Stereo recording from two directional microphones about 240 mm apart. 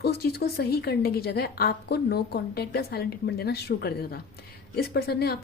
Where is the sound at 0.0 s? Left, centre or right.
Left.